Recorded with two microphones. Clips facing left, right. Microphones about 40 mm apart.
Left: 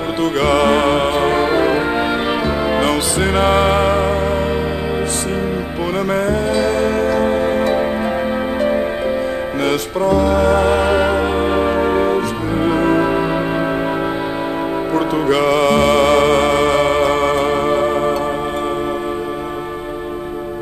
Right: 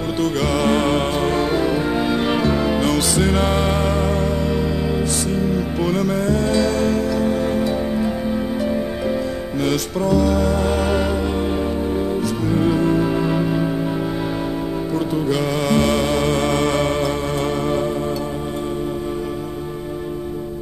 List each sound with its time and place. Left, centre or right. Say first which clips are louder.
0.2 s music: left 5 dB; left
2.2 s music: left 1 dB; centre
2.7 s music: left 2 dB; left
6.0 s music: left 2 dB; left
7.0 s music: left 4 dB; left
9.7 s music: left 3 dB; left
12.5 s music: left 3 dB; left
15.0 s music: left 5 dB; left
16.0 s music: left 7 dB; left
16.4 s music: left 5 dB; left